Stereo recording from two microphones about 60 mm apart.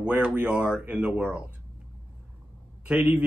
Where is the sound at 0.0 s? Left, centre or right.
Right.